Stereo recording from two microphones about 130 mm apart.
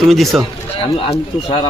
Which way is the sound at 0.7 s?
45° left (ahead or behind).